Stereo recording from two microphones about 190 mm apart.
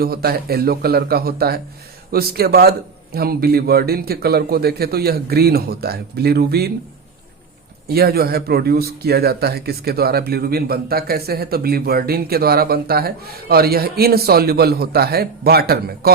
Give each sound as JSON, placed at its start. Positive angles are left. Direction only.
{"t": 0.0, "sound": "a man's voice", "side_deg": -55}
{"t": 7.9, "sound": "speech", "side_deg": -55}